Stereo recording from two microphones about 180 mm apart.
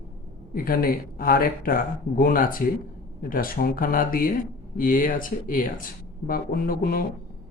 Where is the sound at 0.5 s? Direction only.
55° left (ahead or behind).